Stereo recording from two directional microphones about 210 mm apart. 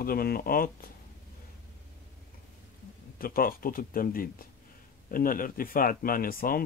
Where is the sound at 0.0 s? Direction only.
45° left (ahead or behind).